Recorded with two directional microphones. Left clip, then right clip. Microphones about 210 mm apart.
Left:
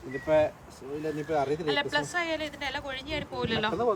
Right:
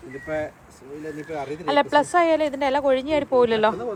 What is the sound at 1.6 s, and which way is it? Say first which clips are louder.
Speech: right 9 dB; centre (ahead or behind).